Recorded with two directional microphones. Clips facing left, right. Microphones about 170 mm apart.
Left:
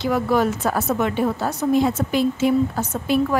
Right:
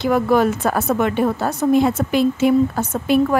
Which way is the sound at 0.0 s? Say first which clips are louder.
Right 3 dB; 55° right (ahead or behind).